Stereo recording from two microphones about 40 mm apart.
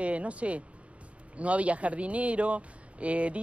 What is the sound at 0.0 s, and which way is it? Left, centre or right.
Speech, right.